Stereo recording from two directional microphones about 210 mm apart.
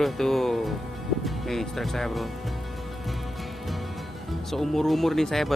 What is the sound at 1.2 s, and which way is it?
Speech, centre (ahead or behind).